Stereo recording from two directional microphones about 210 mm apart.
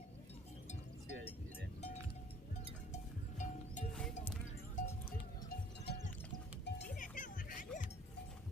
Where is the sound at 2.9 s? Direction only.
35° left (ahead or behind).